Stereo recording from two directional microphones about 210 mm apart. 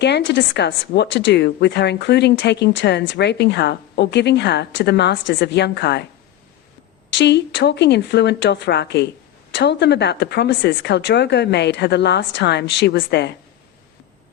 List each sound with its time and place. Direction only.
0.0 s speech: 55° left (ahead or behind)
7.1 s speech: 55° left (ahead or behind)